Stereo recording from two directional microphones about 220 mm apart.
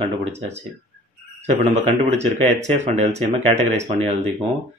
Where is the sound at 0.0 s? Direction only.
25° right (ahead or behind).